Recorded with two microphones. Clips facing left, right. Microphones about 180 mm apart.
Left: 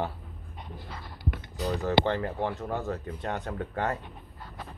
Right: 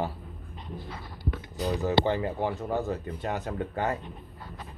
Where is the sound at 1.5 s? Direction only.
10° right (ahead or behind).